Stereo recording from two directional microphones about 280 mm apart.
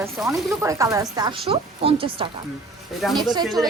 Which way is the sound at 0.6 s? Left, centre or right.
Centre.